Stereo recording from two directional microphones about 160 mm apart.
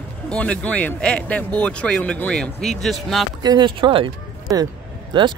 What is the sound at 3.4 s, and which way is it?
Speech, 25° right (ahead or behind).